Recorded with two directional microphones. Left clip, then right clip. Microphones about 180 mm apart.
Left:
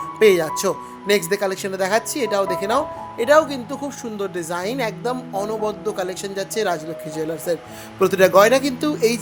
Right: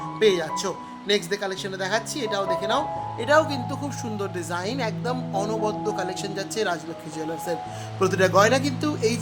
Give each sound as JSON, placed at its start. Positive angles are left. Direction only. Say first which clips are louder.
{"t": 0.2, "sound": "speech", "louder": "left 6 dB", "side_deg": 25}
{"t": 7.9, "sound": "speech", "louder": "left 6 dB", "side_deg": 15}